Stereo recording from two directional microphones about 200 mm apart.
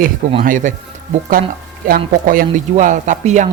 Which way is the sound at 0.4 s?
40° right (ahead or behind).